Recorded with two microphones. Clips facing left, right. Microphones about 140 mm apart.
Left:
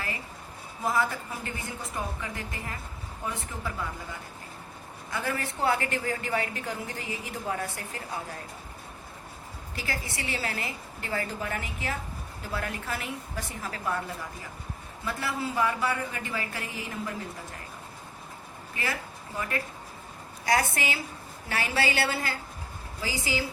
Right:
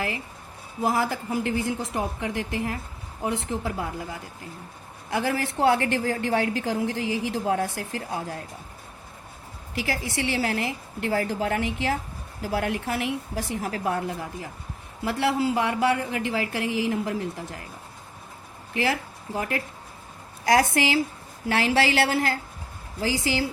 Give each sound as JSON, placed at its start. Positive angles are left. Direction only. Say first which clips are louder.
{"t": 0.9, "sound": "a woman's voice", "louder": "right 3 dB", "side_deg": -80}
{"t": 5.1, "sound": "a woman's voice", "louder": "right 7 dB", "side_deg": -75}
{"t": 9.7, "sound": "a woman's voice", "louder": "right 7 dB", "side_deg": -80}
{"t": 18.7, "sound": "a woman's voice", "louder": "right 8 dB", "side_deg": -75}
{"t": 21.5, "sound": "a woman's voice", "louder": "right 6 dB", "side_deg": -90}